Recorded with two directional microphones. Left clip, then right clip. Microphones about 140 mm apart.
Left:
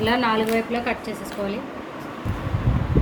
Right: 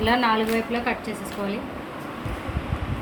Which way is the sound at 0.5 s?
20° right (ahead or behind).